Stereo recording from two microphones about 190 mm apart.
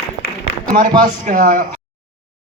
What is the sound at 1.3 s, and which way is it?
Speech, 45° right (ahead or behind).